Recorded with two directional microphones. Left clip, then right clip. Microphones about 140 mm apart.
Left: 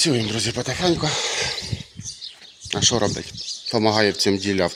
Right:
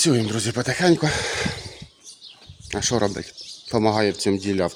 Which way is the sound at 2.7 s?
20° right (ahead or behind).